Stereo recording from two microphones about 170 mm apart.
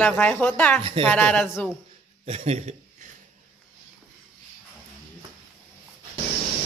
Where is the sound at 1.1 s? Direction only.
5° left (ahead or behind).